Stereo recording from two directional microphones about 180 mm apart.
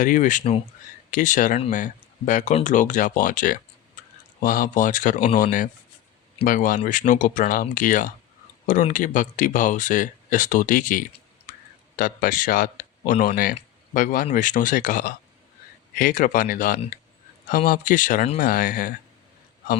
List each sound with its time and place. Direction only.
0.0 s speech: 45° left (ahead or behind)